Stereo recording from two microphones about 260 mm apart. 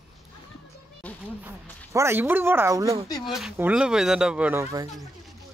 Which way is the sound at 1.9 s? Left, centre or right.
Centre.